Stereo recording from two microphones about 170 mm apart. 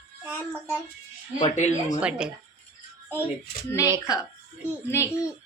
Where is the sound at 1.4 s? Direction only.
40° left (ahead or behind).